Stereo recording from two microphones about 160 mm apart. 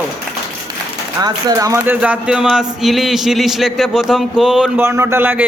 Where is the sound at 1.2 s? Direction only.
20° right (ahead or behind); by 4.8 s 5° right (ahead or behind).